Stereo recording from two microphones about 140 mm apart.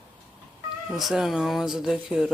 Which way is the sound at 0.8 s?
Centre (ahead or behind).